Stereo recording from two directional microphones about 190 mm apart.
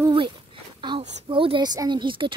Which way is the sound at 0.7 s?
25° right (ahead or behind).